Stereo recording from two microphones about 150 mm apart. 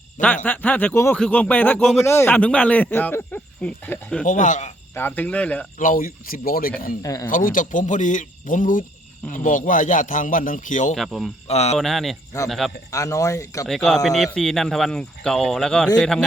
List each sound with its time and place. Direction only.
0.4 s speech: 10° left (ahead or behind)
4.3 s a man's voice: 55° left (ahead or behind)
4.9 s speech: 10° left (ahead or behind)
5.8 s speech: 65° left (ahead or behind)
7.0 s speech: 25° left (ahead or behind)
7.3 s a man's voice: 65° left (ahead or behind)
10.9 s speech: centre (ahead or behind)
11.4 s speech: 45° left (ahead or behind)
11.8 s speech: centre (ahead or behind)
12.9 s speech: 20° left (ahead or behind)
13.7 s speech: centre (ahead or behind)